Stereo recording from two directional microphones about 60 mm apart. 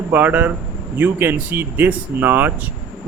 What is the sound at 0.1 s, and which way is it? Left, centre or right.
Speech, right.